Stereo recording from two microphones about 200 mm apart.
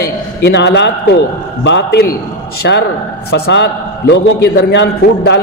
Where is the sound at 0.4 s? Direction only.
60° left (ahead or behind).